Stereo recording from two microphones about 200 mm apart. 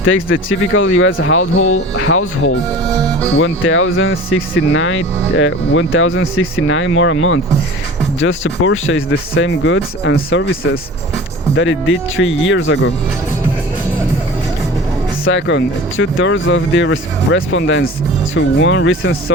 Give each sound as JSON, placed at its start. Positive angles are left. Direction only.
{"t": 0.0, "sound": "speech", "side_deg": 75}
{"t": 1.7, "sound": "speech", "side_deg": 90}
{"t": 3.3, "sound": "speech", "side_deg": 75}
{"t": 11.5, "sound": "speech", "side_deg": 75}
{"t": 15.2, "sound": "speech", "side_deg": 70}